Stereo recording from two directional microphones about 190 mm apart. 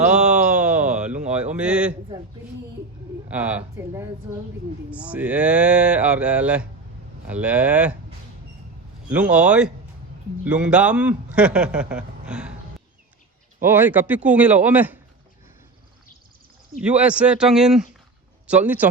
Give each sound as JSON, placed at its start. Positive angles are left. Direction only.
{"t": 0.0, "sound": "a sound", "side_deg": -5}
{"t": 1.5, "sound": "a man's voice", "side_deg": -5}
{"t": 3.2, "sound": "speech", "side_deg": -5}
{"t": 9.0, "sound": "a man's voice", "side_deg": -5}
{"t": 13.6, "sound": "speech", "side_deg": -10}
{"t": 16.7, "sound": "a man's voice", "side_deg": -5}